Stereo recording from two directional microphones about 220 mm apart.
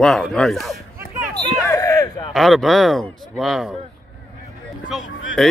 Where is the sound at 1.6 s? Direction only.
15° left (ahead or behind).